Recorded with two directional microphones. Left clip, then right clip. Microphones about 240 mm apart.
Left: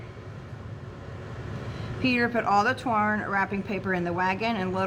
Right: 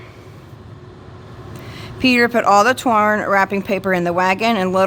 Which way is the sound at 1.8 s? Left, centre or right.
Right.